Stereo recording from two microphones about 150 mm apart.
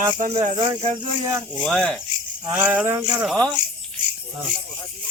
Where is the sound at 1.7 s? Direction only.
5° left (ahead or behind).